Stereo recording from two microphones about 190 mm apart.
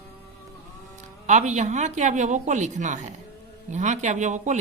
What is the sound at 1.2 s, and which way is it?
Speech, 40° right (ahead or behind).